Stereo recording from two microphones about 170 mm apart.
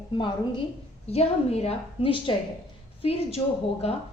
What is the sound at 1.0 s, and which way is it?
A woman's voice, 35° left (ahead or behind).